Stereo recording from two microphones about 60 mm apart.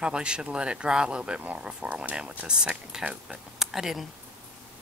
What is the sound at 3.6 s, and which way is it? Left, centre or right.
Speech, centre.